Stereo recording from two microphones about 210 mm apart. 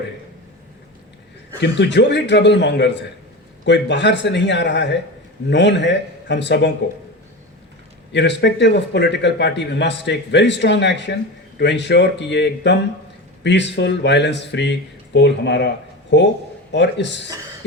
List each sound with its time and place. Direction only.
1.6 s a man's voice: 55° left (ahead or behind)
8.1 s a man's voice: 55° left (ahead or behind)